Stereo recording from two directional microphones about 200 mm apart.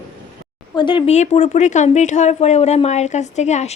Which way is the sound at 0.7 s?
25° left (ahead or behind).